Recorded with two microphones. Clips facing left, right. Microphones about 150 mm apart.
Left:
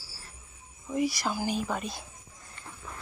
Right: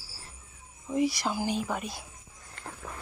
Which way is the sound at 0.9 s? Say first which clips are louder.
Right 1 dB; 20° right (ahead or behind).